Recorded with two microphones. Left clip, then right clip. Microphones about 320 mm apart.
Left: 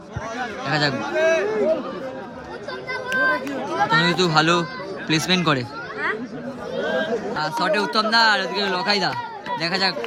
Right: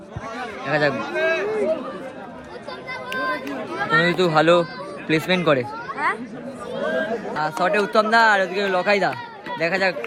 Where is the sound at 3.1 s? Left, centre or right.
Left.